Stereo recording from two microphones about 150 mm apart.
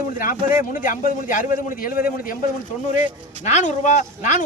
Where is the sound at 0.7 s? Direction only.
65° left (ahead or behind).